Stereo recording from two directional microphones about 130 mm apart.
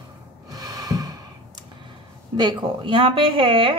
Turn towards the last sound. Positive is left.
turn(degrees=-40)  # may be behind; listen again after turning